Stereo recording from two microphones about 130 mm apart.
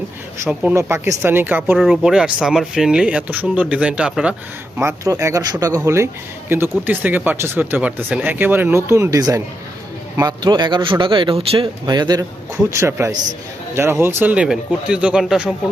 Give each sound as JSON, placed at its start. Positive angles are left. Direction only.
{"t": 0.3, "sound": "speech", "side_deg": -20}
{"t": 1.8, "sound": "speech", "side_deg": 0}
{"t": 4.8, "sound": "a man's voice", "side_deg": -20}